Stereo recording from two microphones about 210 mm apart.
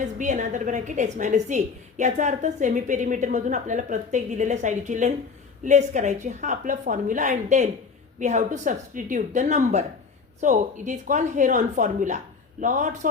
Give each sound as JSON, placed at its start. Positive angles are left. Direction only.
{"t": 0.0, "sound": "a woman's voice", "side_deg": -35}